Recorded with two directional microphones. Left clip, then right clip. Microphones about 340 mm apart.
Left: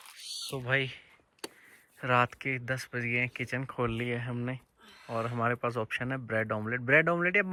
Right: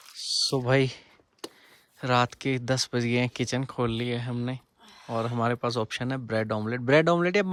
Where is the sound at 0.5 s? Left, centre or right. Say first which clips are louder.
Right 4 dB; centre.